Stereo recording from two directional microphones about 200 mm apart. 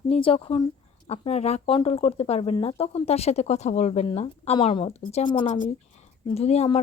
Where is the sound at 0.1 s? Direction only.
30° left (ahead or behind).